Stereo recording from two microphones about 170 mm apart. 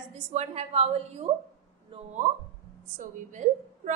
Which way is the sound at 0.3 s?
40° right (ahead or behind).